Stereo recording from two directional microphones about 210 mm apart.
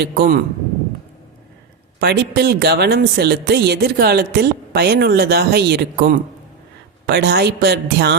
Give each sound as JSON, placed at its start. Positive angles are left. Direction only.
{"t": 0.0, "sound": "speech", "side_deg": -50}
{"t": 2.0, "sound": "speech", "side_deg": -50}